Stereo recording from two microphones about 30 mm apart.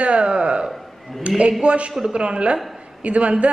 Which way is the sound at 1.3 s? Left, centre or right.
Right.